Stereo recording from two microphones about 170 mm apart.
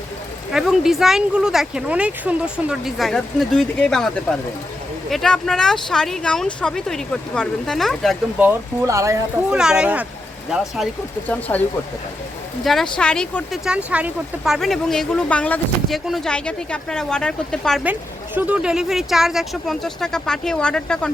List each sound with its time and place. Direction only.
0.5 s speech: centre (ahead or behind)
8.4 s speech: 15° right (ahead or behind)
9.5 s speech: 5° right (ahead or behind)
11.3 s speech: 10° left (ahead or behind)
12.6 s speech: 5° left (ahead or behind)
18.3 s speech: 10° right (ahead or behind)